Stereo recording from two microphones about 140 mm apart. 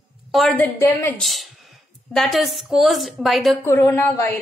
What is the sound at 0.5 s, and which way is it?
Speech, 15° left (ahead or behind).